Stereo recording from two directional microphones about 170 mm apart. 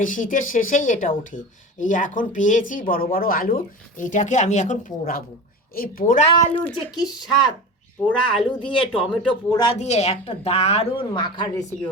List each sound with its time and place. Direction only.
0.0 s speech: 50° left (ahead or behind)
6.6 s speech: 10° left (ahead or behind)
6.9 s a woman's voice: 25° left (ahead or behind)
9.7 s a woman's voice: 40° left (ahead or behind)